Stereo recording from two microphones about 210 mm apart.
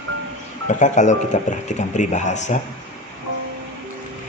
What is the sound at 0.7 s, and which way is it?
Speech, 35° left (ahead or behind).